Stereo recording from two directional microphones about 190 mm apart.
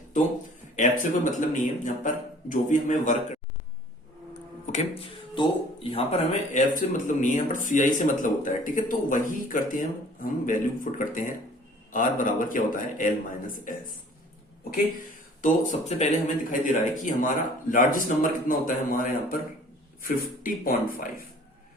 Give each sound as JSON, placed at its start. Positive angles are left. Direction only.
{"t": 0.8, "sound": "speech", "side_deg": 40}
{"t": 4.6, "sound": "speech", "side_deg": 35}
{"t": 15.4, "sound": "speech", "side_deg": 45}